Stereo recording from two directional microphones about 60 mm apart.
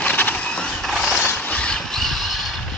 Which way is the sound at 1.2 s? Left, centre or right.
Left.